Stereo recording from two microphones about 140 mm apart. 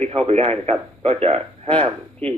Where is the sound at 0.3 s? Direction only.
45° right (ahead or behind).